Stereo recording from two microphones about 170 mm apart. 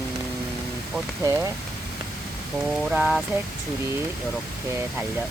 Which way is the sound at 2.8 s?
5° right (ahead or behind).